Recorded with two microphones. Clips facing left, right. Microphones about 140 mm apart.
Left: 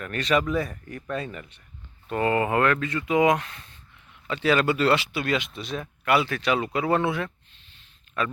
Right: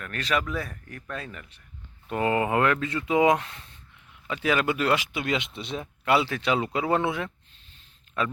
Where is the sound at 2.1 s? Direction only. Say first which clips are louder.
Left 1 dB; 15° right (ahead or behind).